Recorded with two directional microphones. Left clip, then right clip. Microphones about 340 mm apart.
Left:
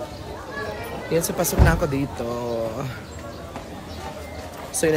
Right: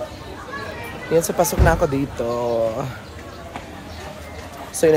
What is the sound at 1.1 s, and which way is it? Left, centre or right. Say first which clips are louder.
Speech: right 5 dB; centre.